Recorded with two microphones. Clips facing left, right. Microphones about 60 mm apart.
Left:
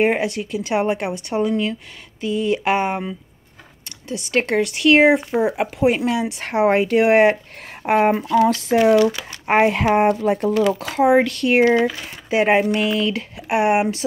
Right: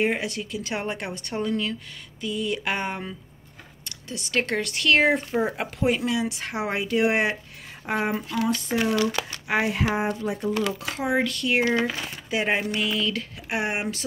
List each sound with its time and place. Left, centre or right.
0.0 s speech: left
4.1 s speech: left
5.9 s speech: left
7.8 s speech: left
8.5 s speech: left
9.5 s speech: left
9.8 s speech: left
10.8 s speech: left
11.1 s speech: left